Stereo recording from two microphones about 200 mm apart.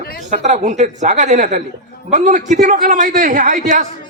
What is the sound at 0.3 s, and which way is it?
A man's voice, 40° right (ahead or behind).